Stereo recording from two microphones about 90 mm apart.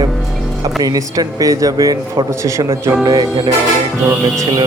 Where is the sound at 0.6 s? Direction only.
45° right (ahead or behind).